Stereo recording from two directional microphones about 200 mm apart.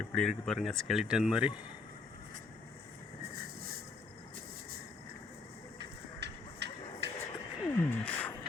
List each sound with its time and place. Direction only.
0.0 s speech: 5° left (ahead or behind)
5.8 s music: 60° right (ahead or behind)
7.6 s a sound: 10° left (ahead or behind)